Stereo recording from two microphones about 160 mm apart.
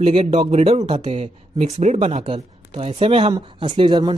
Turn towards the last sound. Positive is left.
turn(degrees=-30)  # may be behind; listen again after turning